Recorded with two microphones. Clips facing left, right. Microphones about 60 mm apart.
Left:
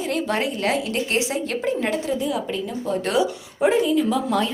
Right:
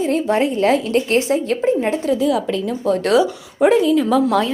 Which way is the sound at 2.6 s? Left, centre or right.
Right.